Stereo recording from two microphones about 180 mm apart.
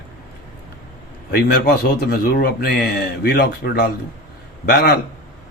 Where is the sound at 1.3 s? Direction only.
60° left (ahead or behind).